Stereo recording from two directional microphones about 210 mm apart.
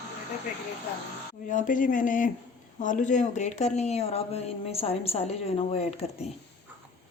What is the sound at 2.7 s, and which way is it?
Speech, 35° left (ahead or behind).